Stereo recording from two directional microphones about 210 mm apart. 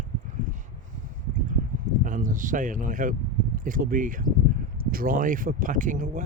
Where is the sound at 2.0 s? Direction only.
40° right (ahead or behind).